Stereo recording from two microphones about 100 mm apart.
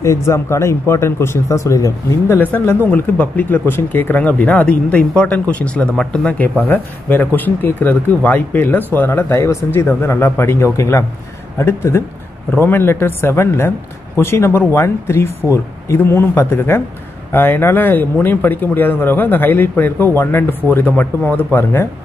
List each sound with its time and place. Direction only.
0.0 s speech: 30° left (ahead or behind)